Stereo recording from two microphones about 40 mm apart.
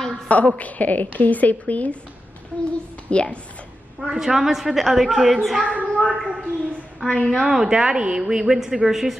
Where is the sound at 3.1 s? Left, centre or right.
Left.